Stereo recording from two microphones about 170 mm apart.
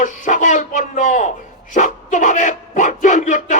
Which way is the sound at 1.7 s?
50° left (ahead or behind).